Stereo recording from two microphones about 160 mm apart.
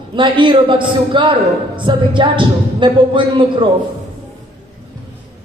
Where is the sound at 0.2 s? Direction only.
30° right (ahead or behind).